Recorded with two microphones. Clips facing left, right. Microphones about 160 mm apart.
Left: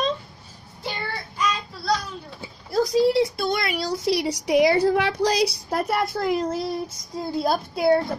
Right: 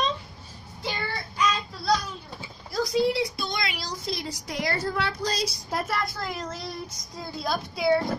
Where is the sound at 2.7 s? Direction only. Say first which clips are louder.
Left 5 dB; 40° left (ahead or behind); by 5.8 s 65° left (ahead or behind).